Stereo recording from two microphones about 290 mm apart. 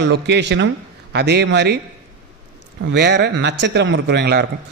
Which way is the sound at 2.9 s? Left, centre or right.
Right.